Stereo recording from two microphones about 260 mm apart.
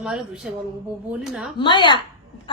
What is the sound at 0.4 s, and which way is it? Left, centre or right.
Speech, centre.